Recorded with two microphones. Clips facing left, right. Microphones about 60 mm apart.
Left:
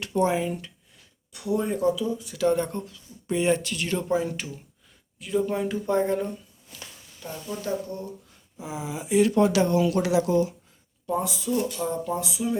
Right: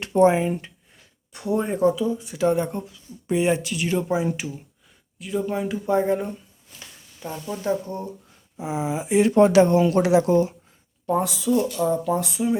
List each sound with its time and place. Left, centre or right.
0.0 s speech: right
5.2 s speech: centre; by 10.5 s right
11.0 s speech: right
12.4 s speech: right